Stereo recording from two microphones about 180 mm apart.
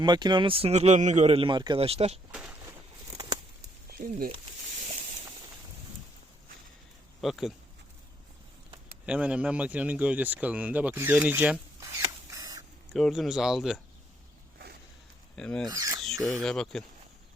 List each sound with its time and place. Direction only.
0.0 s speech: 25° right (ahead or behind)
2.3 s speech: 5° right (ahead or behind)
3.8 s speech: 55° right (ahead or behind)
7.2 s speech: centre (ahead or behind)
9.0 s speech: 5° right (ahead or behind)
12.3 s rodents: 20° right (ahead or behind)
12.9 s speech: centre (ahead or behind)
15.4 s speech: 5° left (ahead or behind)
15.7 s speech: 20° right (ahead or behind)
16.0 s speech: centre (ahead or behind)